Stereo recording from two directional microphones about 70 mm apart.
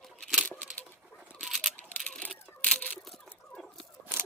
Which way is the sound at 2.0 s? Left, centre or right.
Centre.